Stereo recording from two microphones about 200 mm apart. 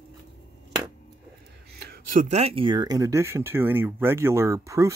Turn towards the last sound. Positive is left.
turn(degrees=-15)  # may be behind; listen again after turning